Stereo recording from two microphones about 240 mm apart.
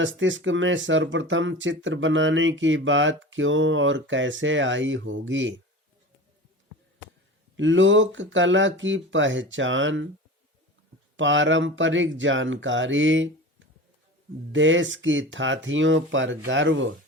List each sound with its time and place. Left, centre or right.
0.0 s speech: right
7.5 s speech: right
11.2 s speech: right